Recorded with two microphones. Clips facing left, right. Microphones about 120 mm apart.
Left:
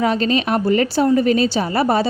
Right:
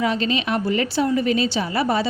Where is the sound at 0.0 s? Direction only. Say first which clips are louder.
Left 4 dB; 45° left (ahead or behind).